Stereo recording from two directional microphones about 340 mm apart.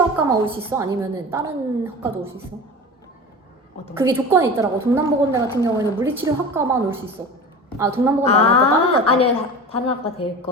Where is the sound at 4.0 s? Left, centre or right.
Centre.